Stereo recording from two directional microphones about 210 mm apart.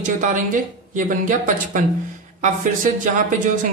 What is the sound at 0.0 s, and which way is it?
Speech, 40° right (ahead or behind).